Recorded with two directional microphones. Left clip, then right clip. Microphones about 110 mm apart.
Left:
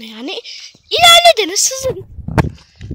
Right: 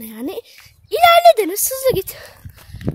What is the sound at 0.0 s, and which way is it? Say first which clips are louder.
Speech: left 3 dB; 15° right (ahead or behind).